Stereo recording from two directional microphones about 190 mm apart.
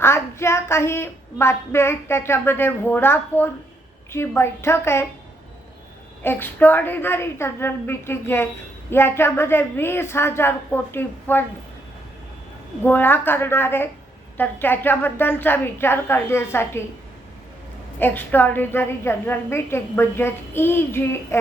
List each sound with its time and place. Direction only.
0.0 s a woman's voice: 15° left (ahead or behind)
6.2 s a woman's voice: 10° left (ahead or behind)
12.8 s a woman's voice: 10° left (ahead or behind)
18.0 s a woman's voice: 10° left (ahead or behind)